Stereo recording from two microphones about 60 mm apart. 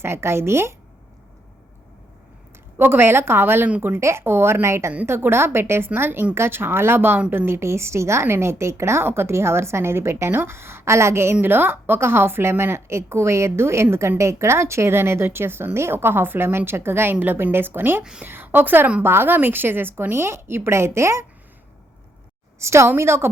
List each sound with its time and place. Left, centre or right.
0.0 s a woman's voice: right
2.7 s speech: right
4.0 s a woman's voice: right
11.4 s a woman's voice: right
22.5 s a woman's voice: right